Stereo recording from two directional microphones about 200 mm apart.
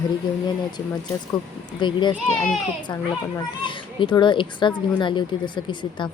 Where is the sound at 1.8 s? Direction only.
25° left (ahead or behind).